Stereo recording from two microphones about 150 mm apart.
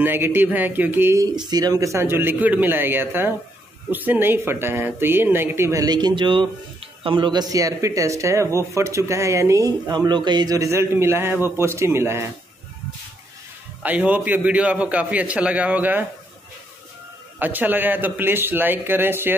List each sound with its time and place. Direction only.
0.0 s a man's voice: 15° right (ahead or behind)
13.8 s a man's voice: 10° right (ahead or behind)
17.4 s a man's voice: 10° right (ahead or behind)